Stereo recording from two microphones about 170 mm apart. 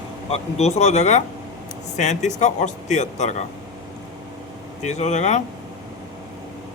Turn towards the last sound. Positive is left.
turn(degrees=45)  # may be behind; listen again after turning